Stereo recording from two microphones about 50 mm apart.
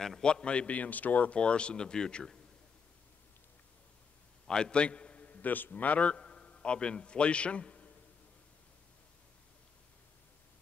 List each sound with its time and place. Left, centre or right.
0.2 s a man's voice: centre
4.5 s a man's voice: centre